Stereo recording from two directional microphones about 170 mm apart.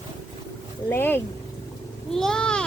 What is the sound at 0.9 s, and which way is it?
Speech, 10° left (ahead or behind).